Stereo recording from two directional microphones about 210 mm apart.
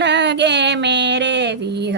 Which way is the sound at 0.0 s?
55° right (ahead or behind).